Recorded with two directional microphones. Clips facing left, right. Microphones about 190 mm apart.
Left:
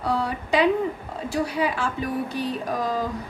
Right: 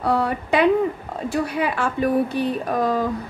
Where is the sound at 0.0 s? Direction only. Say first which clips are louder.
Right 4 dB; 55° right (ahead or behind).